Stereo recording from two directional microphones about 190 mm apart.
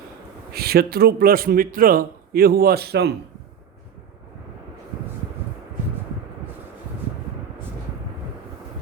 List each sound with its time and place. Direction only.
0.5 s a man's voice: 55° right (ahead or behind)